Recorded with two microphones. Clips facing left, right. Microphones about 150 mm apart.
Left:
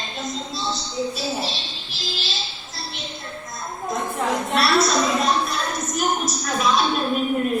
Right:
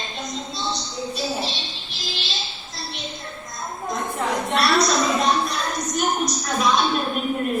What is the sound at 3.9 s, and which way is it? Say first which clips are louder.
A woman's voice: left 1 dB; centre (ahead or behind).